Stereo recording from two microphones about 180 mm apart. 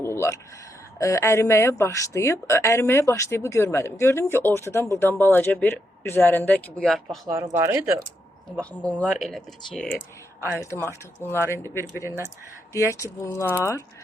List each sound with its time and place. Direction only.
0.0 s a sound: 15° left (ahead or behind)
0.9 s speech: 15° left (ahead or behind)
7.3 s speech: 15° right (ahead or behind)
8.8 s speech: 10° left (ahead or behind)
10.6 s speech: 15° left (ahead or behind)